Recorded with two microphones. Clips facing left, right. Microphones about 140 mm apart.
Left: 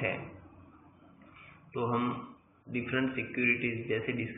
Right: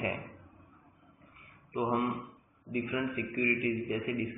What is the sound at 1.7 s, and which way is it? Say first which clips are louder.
A man's voice: right 1 dB; 20° right (ahead or behind).